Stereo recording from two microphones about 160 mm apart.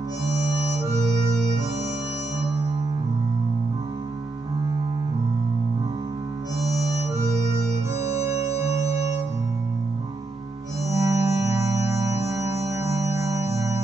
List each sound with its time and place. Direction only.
8.0 s music: 20° right (ahead or behind)
8.6 s music: 40° left (ahead or behind)
10.9 s music: 20° right (ahead or behind)